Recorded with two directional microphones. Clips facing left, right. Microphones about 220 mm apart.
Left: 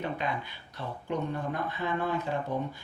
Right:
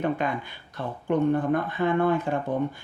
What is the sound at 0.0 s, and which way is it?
Speech, 50° right (ahead or behind).